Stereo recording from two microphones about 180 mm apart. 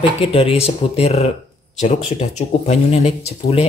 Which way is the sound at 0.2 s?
35° left (ahead or behind).